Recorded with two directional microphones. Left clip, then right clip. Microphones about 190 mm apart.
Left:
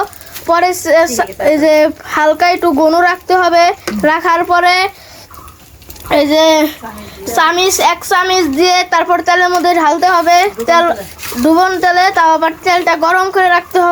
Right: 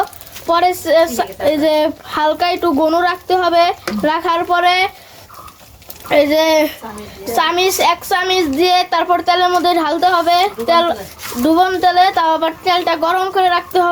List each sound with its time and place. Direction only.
0.4 s a child's voice: 15° left (ahead or behind)
6.1 s a child's voice: 20° left (ahead or behind)